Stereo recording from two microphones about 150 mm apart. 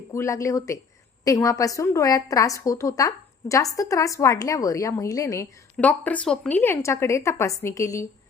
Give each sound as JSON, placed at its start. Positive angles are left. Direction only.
{"t": 0.1, "sound": "a woman's voice", "side_deg": 20}
{"t": 5.7, "sound": "speech", "side_deg": 10}